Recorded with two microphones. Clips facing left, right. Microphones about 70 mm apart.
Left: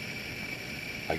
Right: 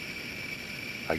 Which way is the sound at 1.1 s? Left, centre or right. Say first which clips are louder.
Right 2 dB; right.